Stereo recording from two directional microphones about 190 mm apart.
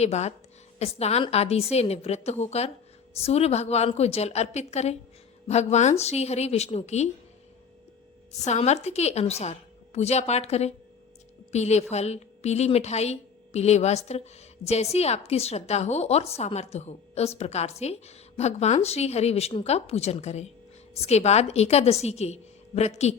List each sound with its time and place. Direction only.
0.0 s a woman's voice: 35° left (ahead or behind)
8.4 s a woman's voice: 35° left (ahead or behind)